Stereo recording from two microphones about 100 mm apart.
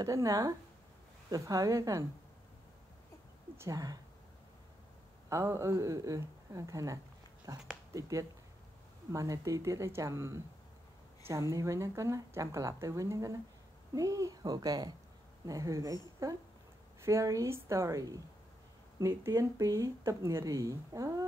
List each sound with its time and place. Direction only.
0.0 s speech: 35° right (ahead or behind)
3.5 s speech: 35° right (ahead or behind)
5.3 s speech: 30° right (ahead or behind)